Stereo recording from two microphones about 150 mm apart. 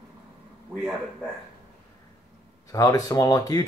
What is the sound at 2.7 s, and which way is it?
Speech, 25° left (ahead or behind).